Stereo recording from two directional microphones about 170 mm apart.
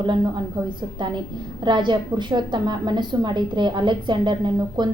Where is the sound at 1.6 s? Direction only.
25° right (ahead or behind).